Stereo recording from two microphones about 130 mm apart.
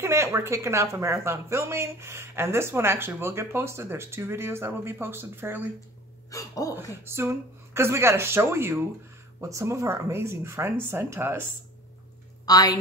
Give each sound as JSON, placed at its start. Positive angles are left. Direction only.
{"t": 0.0, "sound": "speech", "side_deg": -20}
{"t": 6.3, "sound": "speech", "side_deg": 25}
{"t": 7.1, "sound": "speech", "side_deg": -20}
{"t": 12.4, "sound": "a woman's voice", "side_deg": 30}